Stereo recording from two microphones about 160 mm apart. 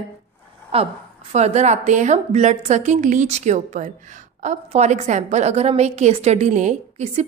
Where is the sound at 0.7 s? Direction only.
35° right (ahead or behind).